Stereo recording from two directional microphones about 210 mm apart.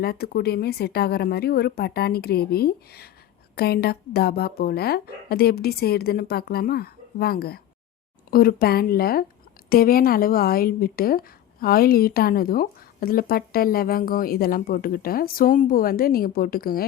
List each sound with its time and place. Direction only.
0.0 s a woman's voice: 50° left (ahead or behind)